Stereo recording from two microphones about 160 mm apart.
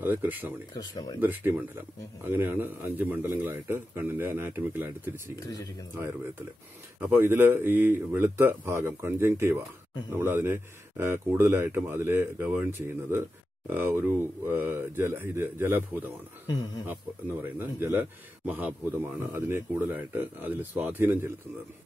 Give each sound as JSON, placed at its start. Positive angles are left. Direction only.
{"t": 0.0, "sound": "speech", "side_deg": -10}
{"t": 0.7, "sound": "speech", "side_deg": 25}
{"t": 1.2, "sound": "speech", "side_deg": -15}
{"t": 5.4, "sound": "speech", "side_deg": 20}
{"t": 7.0, "sound": "speech", "side_deg": -15}
{"t": 16.4, "sound": "speech", "side_deg": 25}
{"t": 16.8, "sound": "speech", "side_deg": -15}